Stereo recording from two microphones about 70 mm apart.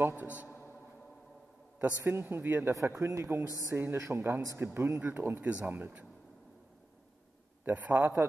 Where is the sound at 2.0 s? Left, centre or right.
Right.